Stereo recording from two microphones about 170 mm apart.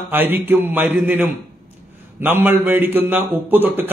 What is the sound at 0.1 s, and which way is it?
A man's voice, 10° right (ahead or behind).